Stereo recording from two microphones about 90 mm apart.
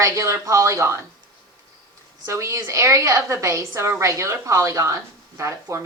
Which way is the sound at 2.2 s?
35° right (ahead or behind).